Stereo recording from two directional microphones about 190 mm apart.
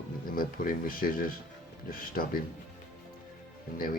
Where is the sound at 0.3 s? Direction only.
50° left (ahead or behind).